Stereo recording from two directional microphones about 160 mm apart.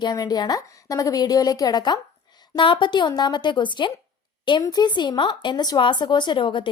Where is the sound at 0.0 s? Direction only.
25° left (ahead or behind).